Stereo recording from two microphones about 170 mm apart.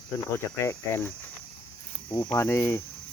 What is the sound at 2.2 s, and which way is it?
Speech, 20° left (ahead or behind).